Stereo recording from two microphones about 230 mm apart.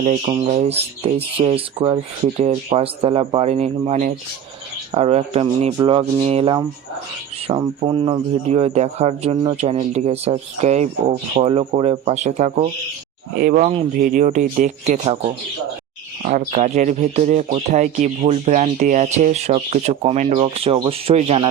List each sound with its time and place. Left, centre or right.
0.0 s speech: right
16.5 s speech: right